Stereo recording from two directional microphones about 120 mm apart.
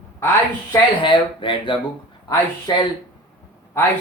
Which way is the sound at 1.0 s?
45° left (ahead or behind).